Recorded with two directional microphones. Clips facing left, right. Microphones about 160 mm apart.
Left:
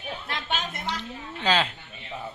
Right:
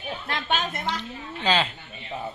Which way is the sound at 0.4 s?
55° right (ahead or behind).